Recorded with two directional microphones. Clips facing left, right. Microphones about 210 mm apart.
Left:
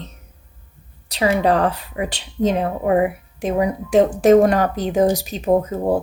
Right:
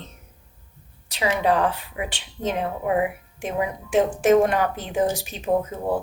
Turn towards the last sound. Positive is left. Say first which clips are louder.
# left 5 dB
turn(degrees=40)  # may be behind; listen again after turning